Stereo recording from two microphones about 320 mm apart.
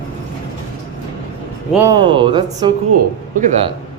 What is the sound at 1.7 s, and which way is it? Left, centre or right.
A man's voice, centre.